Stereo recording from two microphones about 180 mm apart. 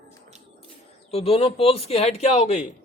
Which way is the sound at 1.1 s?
35° left (ahead or behind).